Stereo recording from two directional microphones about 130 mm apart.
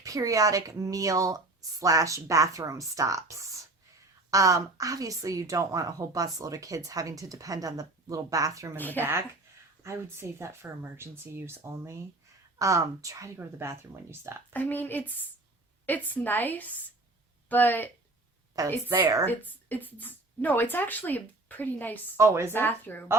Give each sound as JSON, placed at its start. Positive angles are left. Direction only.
{"t": 0.0, "sound": "a woman's voice", "side_deg": -25}
{"t": 8.7, "sound": "speech", "side_deg": 15}
{"t": 9.0, "sound": "a woman's voice", "side_deg": -15}
{"t": 14.5, "sound": "speech", "side_deg": 15}
{"t": 18.5, "sound": "a woman's voice", "side_deg": -25}
{"t": 19.2, "sound": "speech", "side_deg": 15}
{"t": 22.2, "sound": "a woman's voice", "side_deg": -20}
{"t": 22.5, "sound": "speech", "side_deg": 15}